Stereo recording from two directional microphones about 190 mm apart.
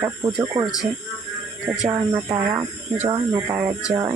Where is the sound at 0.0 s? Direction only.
15° right (ahead or behind).